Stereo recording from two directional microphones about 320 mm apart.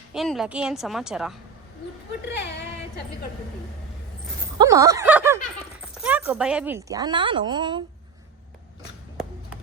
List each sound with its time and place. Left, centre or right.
0.1 s a woman's voice: centre
2.4 s speech: left
4.5 s speech: centre